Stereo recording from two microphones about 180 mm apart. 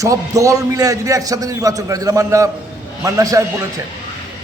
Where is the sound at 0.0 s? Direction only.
20° right (ahead or behind).